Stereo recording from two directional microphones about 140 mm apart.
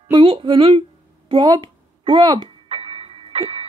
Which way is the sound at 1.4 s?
25° right (ahead or behind).